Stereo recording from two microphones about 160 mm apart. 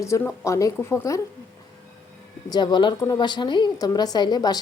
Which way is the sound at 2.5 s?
30° left (ahead or behind).